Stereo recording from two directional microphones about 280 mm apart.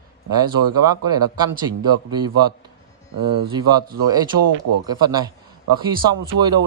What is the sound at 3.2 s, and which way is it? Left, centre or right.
Speech, right.